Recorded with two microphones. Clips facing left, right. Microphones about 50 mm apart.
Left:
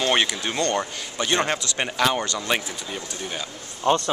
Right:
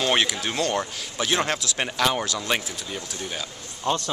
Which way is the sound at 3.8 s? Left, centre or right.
Left.